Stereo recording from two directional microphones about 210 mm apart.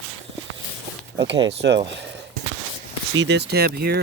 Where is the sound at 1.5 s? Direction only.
55° right (ahead or behind).